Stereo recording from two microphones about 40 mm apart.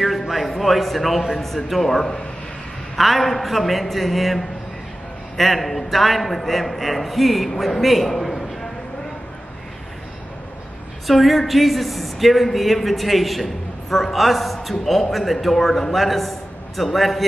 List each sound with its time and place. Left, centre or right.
0.0 s a man's voice: centre
11.1 s a man's voice: centre